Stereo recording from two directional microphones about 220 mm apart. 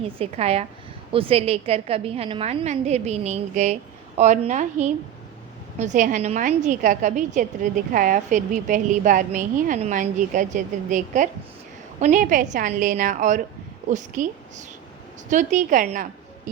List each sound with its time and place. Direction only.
0.2 s a woman's voice: 30° right (ahead or behind)